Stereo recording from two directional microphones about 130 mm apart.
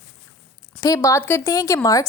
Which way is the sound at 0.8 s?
25° left (ahead or behind).